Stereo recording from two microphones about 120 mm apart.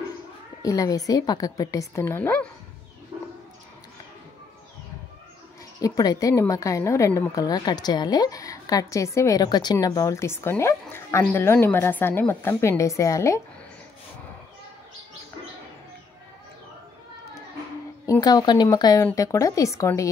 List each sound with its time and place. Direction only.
0.6 s a woman's voice: 30° left (ahead or behind)
5.8 s a woman's voice: 30° left (ahead or behind)
18.2 s a woman's voice: 35° left (ahead or behind)